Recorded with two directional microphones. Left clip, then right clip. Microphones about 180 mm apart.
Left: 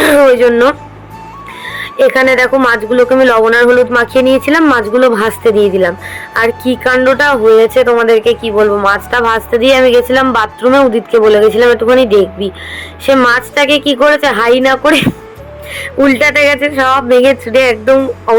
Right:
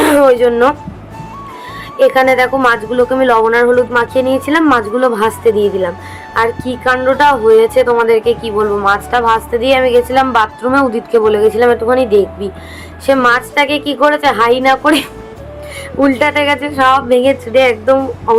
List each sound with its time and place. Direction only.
0.0 s speech: 25° left (ahead or behind)
1.7 s a woman's voice: 15° left (ahead or behind)